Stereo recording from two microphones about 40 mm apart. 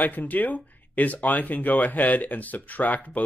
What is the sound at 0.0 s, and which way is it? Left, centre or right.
Speech, left.